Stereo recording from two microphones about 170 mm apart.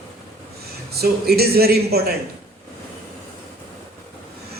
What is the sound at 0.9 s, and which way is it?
Speech, 65° right (ahead or behind).